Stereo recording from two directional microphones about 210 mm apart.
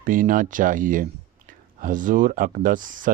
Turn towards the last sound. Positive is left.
turn(degrees=-40)  # may be behind; listen again after turning